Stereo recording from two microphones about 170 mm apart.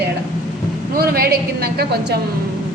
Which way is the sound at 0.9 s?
65° right (ahead or behind).